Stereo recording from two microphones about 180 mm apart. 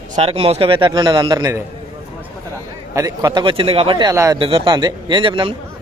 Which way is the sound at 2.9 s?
20° right (ahead or behind).